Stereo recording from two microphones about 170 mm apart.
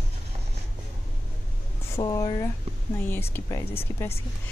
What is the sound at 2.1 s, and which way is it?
Speech, 20° left (ahead or behind).